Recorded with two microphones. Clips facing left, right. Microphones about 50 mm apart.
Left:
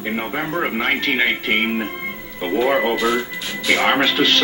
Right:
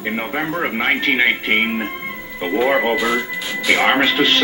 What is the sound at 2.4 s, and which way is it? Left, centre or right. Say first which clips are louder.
Speech: right 1 dB; centre.